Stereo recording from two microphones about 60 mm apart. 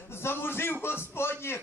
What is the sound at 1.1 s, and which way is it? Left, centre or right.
Music, left.